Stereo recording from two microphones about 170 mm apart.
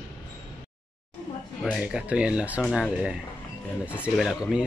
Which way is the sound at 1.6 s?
5° right (ahead or behind).